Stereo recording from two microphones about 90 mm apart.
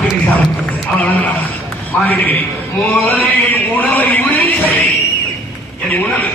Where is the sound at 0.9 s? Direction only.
20° left (ahead or behind).